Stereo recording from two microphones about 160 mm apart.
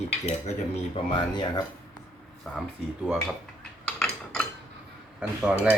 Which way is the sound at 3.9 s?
5° left (ahead or behind).